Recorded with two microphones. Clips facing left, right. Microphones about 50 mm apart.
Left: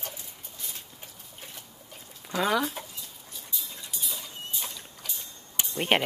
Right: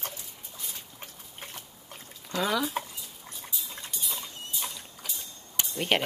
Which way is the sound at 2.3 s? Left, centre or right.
Centre.